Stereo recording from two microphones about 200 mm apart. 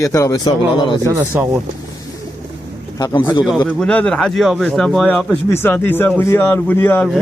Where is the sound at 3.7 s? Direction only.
5° left (ahead or behind).